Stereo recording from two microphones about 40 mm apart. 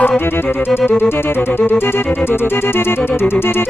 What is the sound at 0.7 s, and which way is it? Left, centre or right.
Music, left.